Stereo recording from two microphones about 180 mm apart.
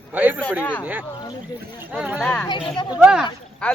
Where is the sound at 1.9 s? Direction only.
5° right (ahead or behind).